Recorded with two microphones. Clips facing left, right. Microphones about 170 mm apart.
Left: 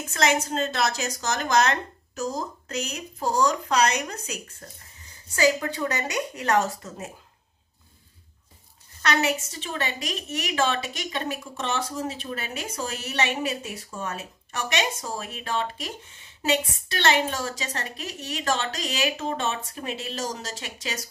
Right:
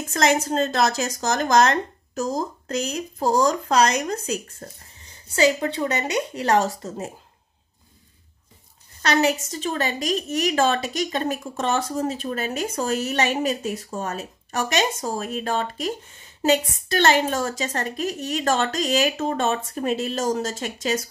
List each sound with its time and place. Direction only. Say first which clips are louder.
0.1 s a woman's voice: right 4 dB; 40° right (ahead or behind)
9.0 s a woman's voice: right 4 dB; 35° right (ahead or behind)